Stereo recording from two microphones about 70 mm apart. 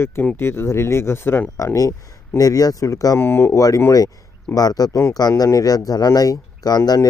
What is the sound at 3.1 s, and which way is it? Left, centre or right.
Speech, left.